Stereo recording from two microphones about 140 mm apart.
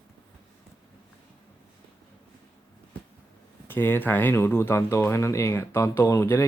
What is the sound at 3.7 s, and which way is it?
Speech, 15° left (ahead or behind).